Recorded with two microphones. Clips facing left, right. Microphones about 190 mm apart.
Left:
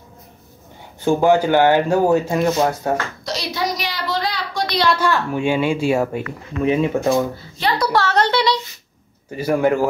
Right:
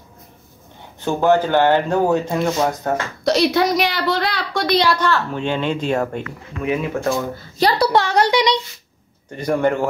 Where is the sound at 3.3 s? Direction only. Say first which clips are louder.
Right 9 dB; 60° right (ahead or behind).